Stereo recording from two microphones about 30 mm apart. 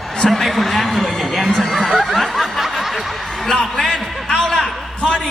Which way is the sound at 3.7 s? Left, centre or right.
Centre.